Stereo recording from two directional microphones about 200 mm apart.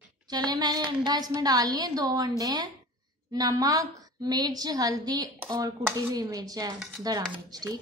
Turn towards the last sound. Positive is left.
turn(degrees=-20)  # may be behind; listen again after turning